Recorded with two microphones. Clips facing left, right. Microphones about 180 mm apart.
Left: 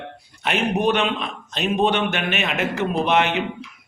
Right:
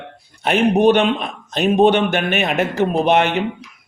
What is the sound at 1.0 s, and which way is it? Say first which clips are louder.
A man's voice: right 5 dB; 45° right (ahead or behind).